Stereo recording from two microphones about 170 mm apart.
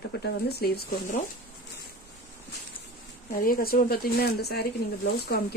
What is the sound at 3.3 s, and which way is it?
Speech, 55° left (ahead or behind).